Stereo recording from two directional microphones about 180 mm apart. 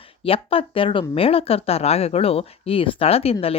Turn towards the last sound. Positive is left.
turn(degrees=35)  # may be behind; listen again after turning